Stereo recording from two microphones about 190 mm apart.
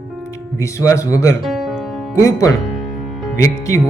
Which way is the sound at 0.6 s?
15° left (ahead or behind).